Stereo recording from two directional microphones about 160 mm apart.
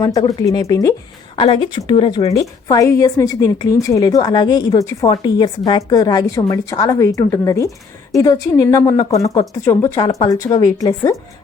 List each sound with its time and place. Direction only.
0.0 s a woman's voice: 20° left (ahead or behind)
1.4 s a woman's voice: 35° left (ahead or behind)